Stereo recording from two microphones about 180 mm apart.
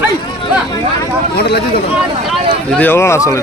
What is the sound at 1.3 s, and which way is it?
Speech, 65° left (ahead or behind).